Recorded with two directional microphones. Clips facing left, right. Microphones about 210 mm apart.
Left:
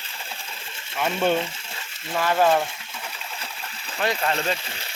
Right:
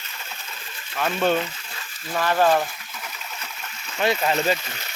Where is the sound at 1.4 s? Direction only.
25° left (ahead or behind).